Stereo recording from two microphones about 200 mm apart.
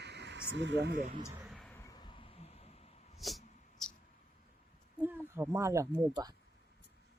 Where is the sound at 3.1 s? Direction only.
Centre (ahead or behind).